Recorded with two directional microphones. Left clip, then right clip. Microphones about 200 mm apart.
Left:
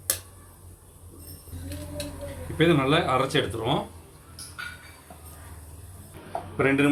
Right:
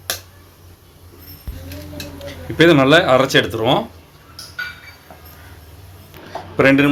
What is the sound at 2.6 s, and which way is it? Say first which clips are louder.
Speech: right 11 dB; 50° right (ahead or behind).